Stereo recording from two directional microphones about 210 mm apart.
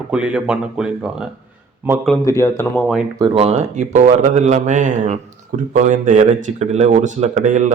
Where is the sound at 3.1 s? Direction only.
25° right (ahead or behind).